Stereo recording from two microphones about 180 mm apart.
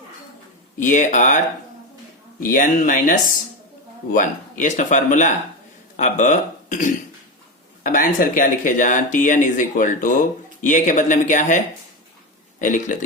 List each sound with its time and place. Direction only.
0.8 s speech: 45° left (ahead or behind)
2.5 s speech: 50° left (ahead or behind)